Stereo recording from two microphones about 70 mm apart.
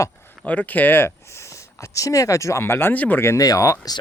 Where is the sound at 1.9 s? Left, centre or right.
Left.